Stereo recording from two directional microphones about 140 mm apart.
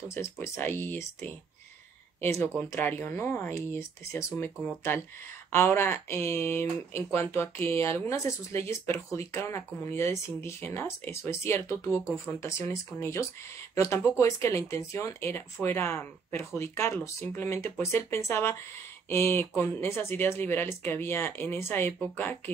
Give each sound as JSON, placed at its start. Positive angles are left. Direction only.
{"t": 0.1, "sound": "speech", "side_deg": 20}